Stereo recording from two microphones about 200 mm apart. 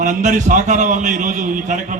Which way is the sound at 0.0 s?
35° right (ahead or behind).